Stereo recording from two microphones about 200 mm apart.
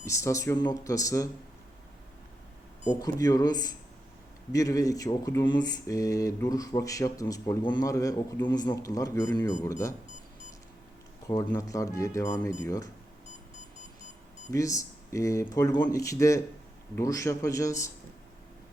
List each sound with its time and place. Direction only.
0.0 s speech: 15° left (ahead or behind)
3.0 s speech: 20° left (ahead or behind)
11.3 s speech: 15° left (ahead or behind)
14.5 s speech: 15° left (ahead or behind)